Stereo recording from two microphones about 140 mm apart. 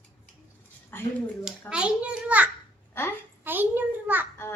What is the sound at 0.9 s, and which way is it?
Speech, 15° left (ahead or behind).